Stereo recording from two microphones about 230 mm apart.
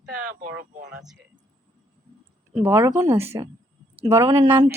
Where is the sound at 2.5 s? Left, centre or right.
Centre.